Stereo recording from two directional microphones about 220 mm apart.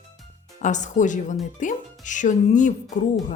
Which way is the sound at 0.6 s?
35° left (ahead or behind).